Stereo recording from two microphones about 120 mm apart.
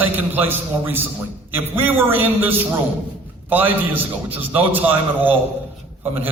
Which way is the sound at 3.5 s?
15° right (ahead or behind).